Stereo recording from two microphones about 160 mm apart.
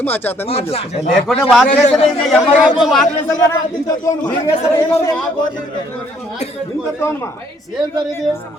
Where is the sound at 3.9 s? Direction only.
20° left (ahead or behind).